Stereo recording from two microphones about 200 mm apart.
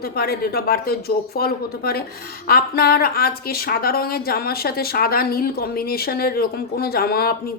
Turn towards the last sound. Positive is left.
turn(degrees=50)  # may be behind; listen again after turning